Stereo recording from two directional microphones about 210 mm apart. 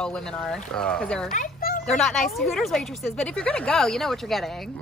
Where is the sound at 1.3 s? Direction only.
40° left (ahead or behind).